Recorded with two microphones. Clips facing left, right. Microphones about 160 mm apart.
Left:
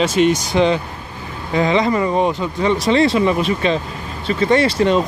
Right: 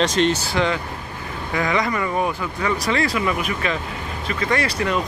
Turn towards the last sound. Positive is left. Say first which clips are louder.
# left 7 dB
turn(degrees=25)  # may be behind; listen again after turning